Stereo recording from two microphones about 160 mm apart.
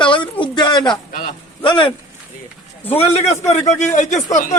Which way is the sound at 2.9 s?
40° left (ahead or behind).